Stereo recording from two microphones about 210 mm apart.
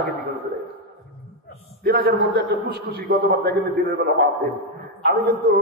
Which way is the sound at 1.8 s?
45° right (ahead or behind).